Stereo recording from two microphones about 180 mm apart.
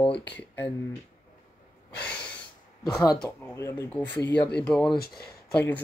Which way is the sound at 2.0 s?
5° left (ahead or behind).